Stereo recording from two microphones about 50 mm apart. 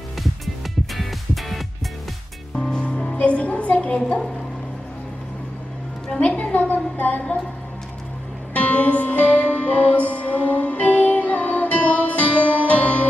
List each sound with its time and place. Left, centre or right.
0.9 s music: centre
2.5 s music: centre
6.1 s a sound: left
8.5 s music: left